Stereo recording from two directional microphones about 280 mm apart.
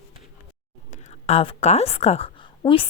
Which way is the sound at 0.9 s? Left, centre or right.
Left.